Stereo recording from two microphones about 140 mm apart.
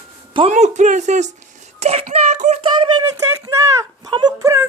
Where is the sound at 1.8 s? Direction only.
50° right (ahead or behind).